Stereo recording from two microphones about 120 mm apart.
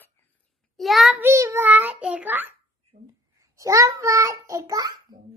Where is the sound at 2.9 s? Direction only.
90° right.